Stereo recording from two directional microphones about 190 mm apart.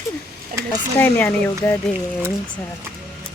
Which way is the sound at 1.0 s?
10° left (ahead or behind).